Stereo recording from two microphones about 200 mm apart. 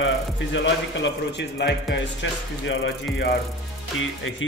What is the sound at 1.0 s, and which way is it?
Speech, 60° left (ahead or behind).